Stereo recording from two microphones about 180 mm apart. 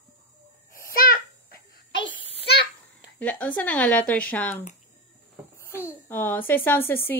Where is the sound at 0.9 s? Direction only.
55° left (ahead or behind).